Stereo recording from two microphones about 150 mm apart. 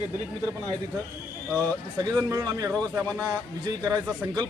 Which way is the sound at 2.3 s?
25° right (ahead or behind).